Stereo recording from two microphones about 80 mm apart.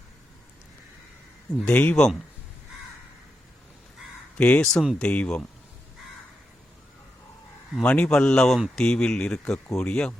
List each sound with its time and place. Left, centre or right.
1.6 s speech: centre
2.0 s speech: centre
4.4 s speech: centre
4.6 s speech: centre
4.9 s a man's voice: centre
7.8 s a man's voice: centre